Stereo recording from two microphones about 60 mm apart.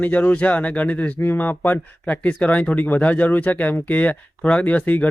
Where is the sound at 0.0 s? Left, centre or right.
Left.